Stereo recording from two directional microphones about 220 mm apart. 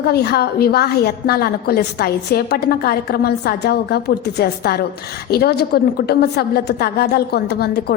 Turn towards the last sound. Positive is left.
turn(degrees=45)  # may be behind; listen again after turning